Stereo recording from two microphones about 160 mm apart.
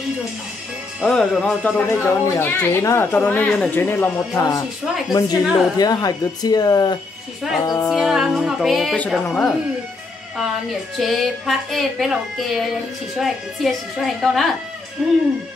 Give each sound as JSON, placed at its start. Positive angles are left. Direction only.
{"t": 1.0, "sound": "speech", "side_deg": 0}
{"t": 3.4, "sound": "speech", "side_deg": 5}
{"t": 3.8, "sound": "speech", "side_deg": 15}
{"t": 7.9, "sound": "speech", "side_deg": 0}
{"t": 11.0, "sound": "speech", "side_deg": 0}